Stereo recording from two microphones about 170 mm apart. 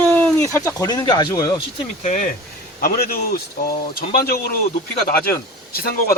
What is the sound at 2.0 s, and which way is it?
Speech, 45° left (ahead or behind).